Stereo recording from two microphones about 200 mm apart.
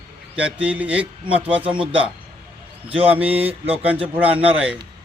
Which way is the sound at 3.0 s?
10° right (ahead or behind).